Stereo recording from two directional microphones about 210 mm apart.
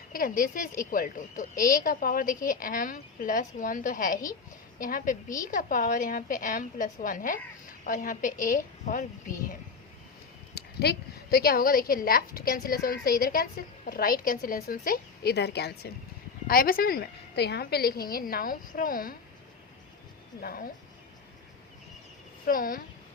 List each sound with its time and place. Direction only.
0.1 s a woman's voice: 40° left (ahead or behind)
10.5 s a woman's voice: 50° left (ahead or behind)
20.4 s a woman's voice: 45° left (ahead or behind)
22.4 s a woman's voice: 40° left (ahead or behind)